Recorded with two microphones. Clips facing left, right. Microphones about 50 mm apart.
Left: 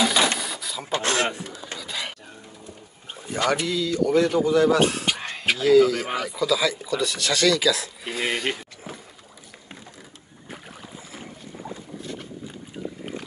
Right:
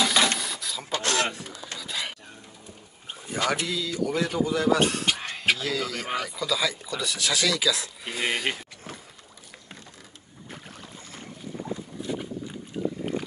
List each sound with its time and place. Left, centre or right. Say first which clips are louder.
0.0 s printer: left 2 dB; centre
0.9 s throat clearing: left 3 dB; left
1.4 s a sound: left 3 dB; centre
3.1 s speech: left 3 dB; centre
10.5 s boat: left 3 dB; centre
12.1 s boat: right 6 dB; centre